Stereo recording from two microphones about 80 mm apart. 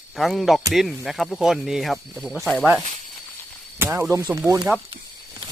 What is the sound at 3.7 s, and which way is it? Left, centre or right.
Speech, right.